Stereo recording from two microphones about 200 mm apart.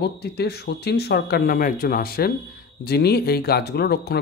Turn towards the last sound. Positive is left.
turn(degrees=55)  # may be behind; listen again after turning